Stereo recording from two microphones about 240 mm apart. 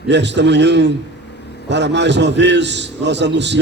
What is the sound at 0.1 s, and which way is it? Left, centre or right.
A man's voice, right.